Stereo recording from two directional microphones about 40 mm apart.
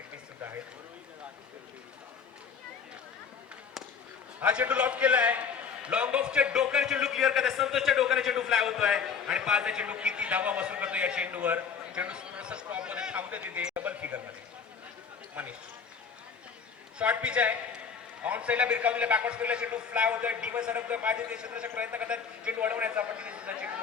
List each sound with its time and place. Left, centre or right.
4.4 s a man's voice: right
13.3 s a man's voice: right
15.4 s a man's voice: right
17.2 s a man's voice: right
21.2 s a man's voice: right